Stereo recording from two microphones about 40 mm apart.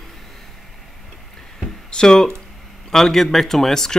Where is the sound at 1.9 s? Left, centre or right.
Centre.